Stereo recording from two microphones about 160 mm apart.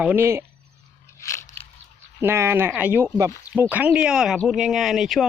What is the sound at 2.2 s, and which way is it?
Speech, 15° right (ahead or behind).